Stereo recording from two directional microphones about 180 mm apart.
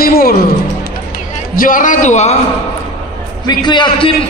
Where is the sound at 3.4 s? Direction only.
25° left (ahead or behind).